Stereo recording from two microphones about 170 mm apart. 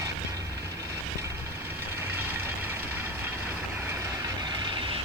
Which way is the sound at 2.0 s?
15° right (ahead or behind).